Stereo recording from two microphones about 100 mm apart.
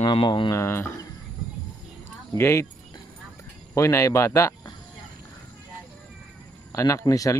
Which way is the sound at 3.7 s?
30° left (ahead or behind).